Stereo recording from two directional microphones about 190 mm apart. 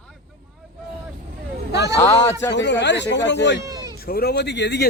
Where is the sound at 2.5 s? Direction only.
70° left (ahead or behind).